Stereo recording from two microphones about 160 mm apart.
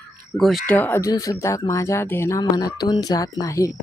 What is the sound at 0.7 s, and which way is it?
Speech, 10° left (ahead or behind).